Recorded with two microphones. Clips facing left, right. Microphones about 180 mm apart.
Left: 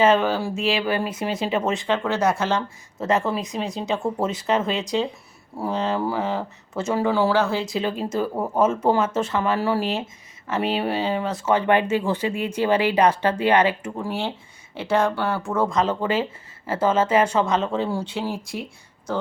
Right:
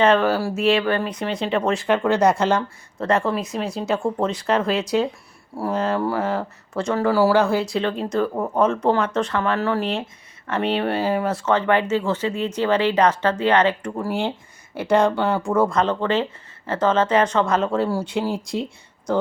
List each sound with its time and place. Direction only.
0.0 s speech: 5° left (ahead or behind)
1.9 s speech: 15° right (ahead or behind)
2.6 s speech: centre (ahead or behind)
7.7 s speech: 5° left (ahead or behind)
11.4 s speech: 15° left (ahead or behind)
14.1 s speech: 15° right (ahead or behind)